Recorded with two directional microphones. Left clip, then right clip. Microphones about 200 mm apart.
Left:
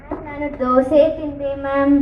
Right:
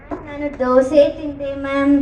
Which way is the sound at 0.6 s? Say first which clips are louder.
Right 1 dB; 35° right (ahead or behind).